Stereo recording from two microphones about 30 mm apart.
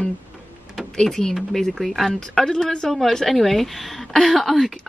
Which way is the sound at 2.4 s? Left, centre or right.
Left.